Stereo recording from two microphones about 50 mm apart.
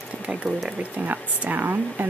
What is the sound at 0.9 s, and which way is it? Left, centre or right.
Speech, right.